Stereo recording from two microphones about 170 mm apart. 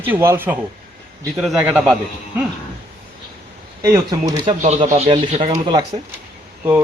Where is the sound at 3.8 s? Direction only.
20° right (ahead or behind).